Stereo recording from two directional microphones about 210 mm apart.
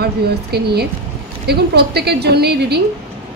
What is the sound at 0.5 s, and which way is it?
Speech, 50° right (ahead or behind).